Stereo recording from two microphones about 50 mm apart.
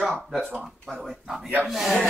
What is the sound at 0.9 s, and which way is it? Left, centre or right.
Speech, centre.